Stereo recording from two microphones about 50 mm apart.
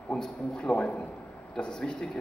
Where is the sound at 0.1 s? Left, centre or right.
Centre.